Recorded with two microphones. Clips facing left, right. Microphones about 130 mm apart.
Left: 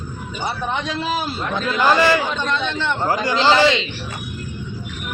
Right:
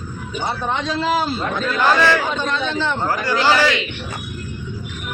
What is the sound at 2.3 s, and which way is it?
Speech, 5° right (ahead or behind).